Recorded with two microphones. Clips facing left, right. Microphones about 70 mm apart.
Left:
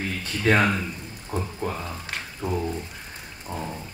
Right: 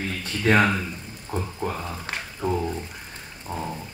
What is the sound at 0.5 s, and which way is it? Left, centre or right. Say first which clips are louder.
Speech: right 1 dB; centre.